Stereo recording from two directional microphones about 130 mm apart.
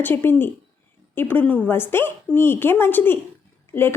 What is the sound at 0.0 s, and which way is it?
A woman's voice, 15° left (ahead or behind).